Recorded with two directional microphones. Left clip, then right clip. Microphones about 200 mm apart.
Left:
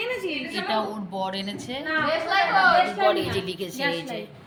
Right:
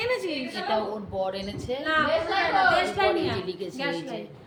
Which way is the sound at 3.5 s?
Centre (ahead or behind).